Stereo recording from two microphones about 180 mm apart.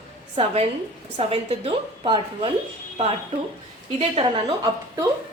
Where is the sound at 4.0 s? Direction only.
30° right (ahead or behind).